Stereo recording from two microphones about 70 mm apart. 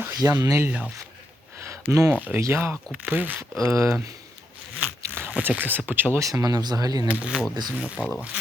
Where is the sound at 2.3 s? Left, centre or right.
Right.